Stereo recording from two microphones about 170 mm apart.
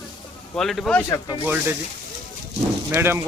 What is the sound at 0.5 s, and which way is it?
Speech, centre (ahead or behind).